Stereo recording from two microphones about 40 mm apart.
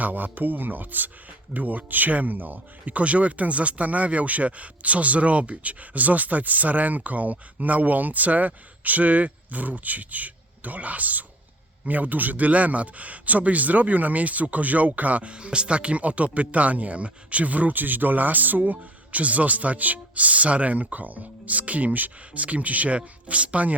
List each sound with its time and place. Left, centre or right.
0.0 s speech: right